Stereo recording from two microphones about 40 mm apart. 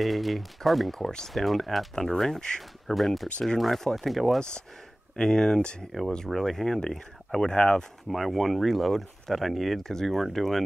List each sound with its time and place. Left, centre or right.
0.0 s speech: centre
2.9 s speech: centre
5.1 s speech: centre
5.6 s speech: left
5.9 s speech: centre
8.1 s speech: centre